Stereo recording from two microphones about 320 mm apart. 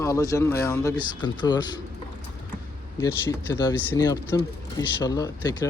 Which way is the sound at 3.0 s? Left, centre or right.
Centre.